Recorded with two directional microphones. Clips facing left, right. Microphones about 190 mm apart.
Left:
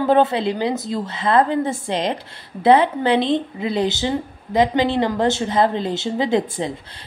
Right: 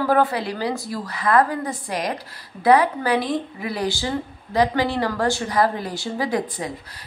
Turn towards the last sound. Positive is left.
turn(degrees=25)  # may be behind; listen again after turning